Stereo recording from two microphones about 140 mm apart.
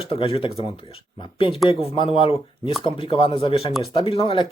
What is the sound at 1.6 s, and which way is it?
Speech, 40° left (ahead or behind).